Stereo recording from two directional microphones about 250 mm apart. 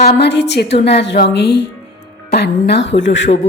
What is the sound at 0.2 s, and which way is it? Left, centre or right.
Music, left.